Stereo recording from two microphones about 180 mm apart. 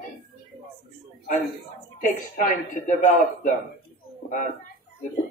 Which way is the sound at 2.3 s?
45° left (ahead or behind).